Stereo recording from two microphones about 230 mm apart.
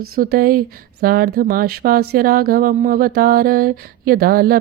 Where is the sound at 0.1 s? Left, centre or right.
Right.